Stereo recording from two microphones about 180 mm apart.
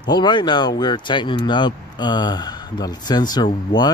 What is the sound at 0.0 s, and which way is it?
Speech, 25° left (ahead or behind).